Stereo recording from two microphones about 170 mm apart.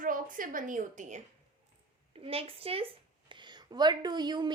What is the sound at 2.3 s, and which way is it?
A woman's voice, 35° right (ahead or behind).